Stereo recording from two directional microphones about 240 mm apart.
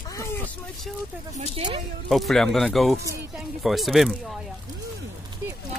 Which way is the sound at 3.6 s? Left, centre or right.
Centre.